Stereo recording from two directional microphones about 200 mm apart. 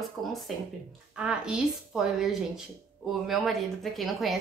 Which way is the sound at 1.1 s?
5° right (ahead or behind).